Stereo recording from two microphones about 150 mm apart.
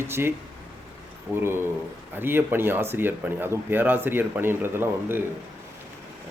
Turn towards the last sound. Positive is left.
turn(degrees=-15)  # may be behind; listen again after turning